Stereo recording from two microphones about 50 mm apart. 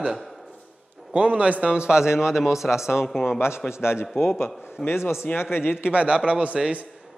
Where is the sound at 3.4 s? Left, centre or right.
Left.